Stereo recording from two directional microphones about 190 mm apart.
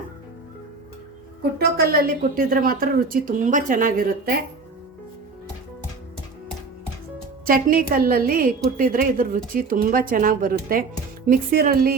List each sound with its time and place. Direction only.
1.5 s speech: 55° right (ahead or behind)
7.4 s speech: 50° right (ahead or behind)